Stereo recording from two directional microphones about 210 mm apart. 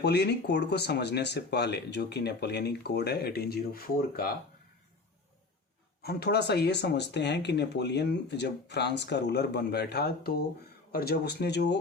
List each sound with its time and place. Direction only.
0.0 s speech: 50° left (ahead or behind)
6.0 s speech: 50° left (ahead or behind)